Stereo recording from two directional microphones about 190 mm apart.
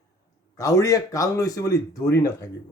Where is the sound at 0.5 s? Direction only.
15° left (ahead or behind).